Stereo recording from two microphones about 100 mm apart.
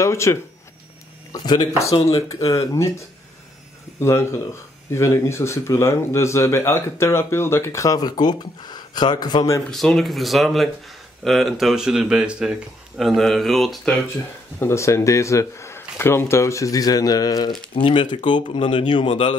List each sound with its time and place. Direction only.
0.0 s speech: 30° left (ahead or behind)
1.3 s speech: 45° left (ahead or behind)
4.0 s speech: 25° left (ahead or behind); by 9.5 s 45° left (ahead or behind)
9.7 s speech: 5° left (ahead or behind)
14.6 s speech: 30° left (ahead or behind)
17.8 s speech: 55° left (ahead or behind)
19.0 s speech: 70° left (ahead or behind)